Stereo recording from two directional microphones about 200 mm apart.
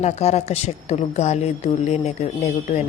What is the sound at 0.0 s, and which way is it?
A woman's voice, 35° left (ahead or behind).